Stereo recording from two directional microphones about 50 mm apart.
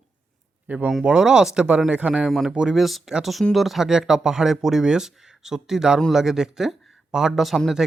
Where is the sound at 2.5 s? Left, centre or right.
Centre.